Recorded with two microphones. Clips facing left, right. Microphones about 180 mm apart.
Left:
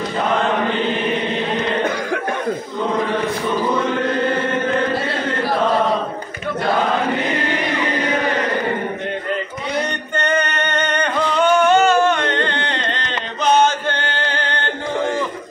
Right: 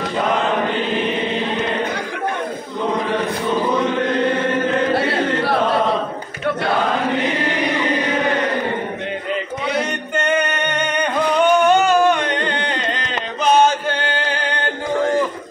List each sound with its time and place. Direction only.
4.9 s carnatic music: 65° right (ahead or behind)
10.1 s music: 10° right (ahead or behind)
11.6 s a sound: 15° right (ahead or behind)